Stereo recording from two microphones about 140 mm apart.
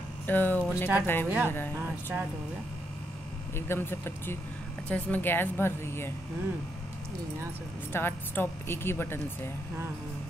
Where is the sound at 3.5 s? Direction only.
15° left (ahead or behind).